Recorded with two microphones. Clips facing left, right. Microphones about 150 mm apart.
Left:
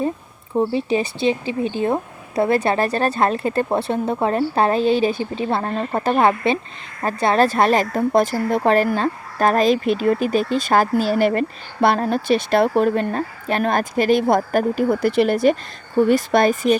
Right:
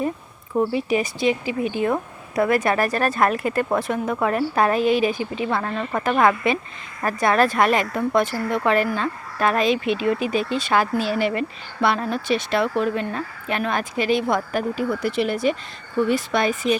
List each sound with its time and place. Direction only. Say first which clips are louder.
0.5 s speech: left 2 dB; 30° left (ahead or behind)